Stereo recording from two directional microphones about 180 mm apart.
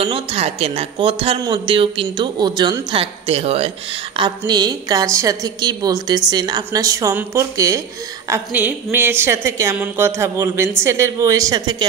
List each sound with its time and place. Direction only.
0.0 s a woman's voice: 30° right (ahead or behind)
4.2 s a woman's voice: 25° right (ahead or behind)